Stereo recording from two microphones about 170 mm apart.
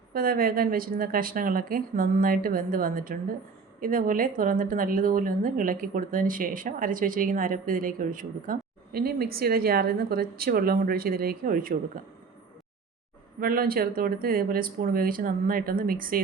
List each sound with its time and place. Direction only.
0.1 s a woman's voice: 60° right (ahead or behind)
13.4 s a woman's voice: 60° right (ahead or behind)